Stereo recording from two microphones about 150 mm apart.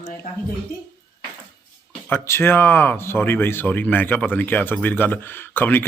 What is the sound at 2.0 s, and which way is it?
Speech, 15° left (ahead or behind).